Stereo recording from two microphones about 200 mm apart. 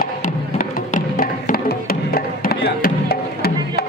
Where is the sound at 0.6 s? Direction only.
40° left (ahead or behind).